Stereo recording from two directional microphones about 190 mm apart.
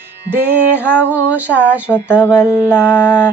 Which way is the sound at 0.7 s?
10° right (ahead or behind).